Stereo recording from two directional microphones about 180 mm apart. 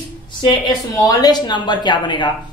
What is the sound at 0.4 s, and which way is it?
A woman's voice, 25° left (ahead or behind).